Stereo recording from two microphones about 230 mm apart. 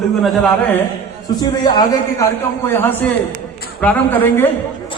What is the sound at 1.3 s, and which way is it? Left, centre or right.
A man's voice, centre.